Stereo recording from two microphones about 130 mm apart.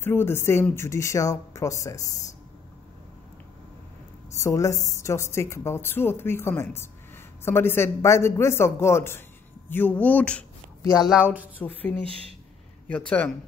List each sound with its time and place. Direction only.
0.0 s a woman's voice: 15° left (ahead or behind)
4.4 s a woman's voice: 25° left (ahead or behind)
11.0 s speech: centre (ahead or behind)
11.5 s speech: 10° left (ahead or behind)